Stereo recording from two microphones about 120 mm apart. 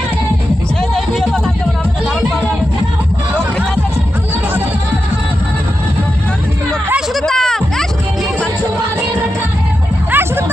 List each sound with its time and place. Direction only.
0.8 s music: centre (ahead or behind)
7.1 s a sound: 5° left (ahead or behind)
10.1 s hubbub: 20° right (ahead or behind)